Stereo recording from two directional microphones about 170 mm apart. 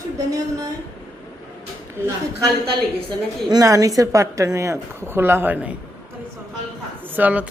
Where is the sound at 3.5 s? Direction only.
20° right (ahead or behind).